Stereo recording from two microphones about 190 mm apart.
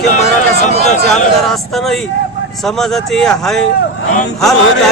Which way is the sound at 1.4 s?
Centre (ahead or behind).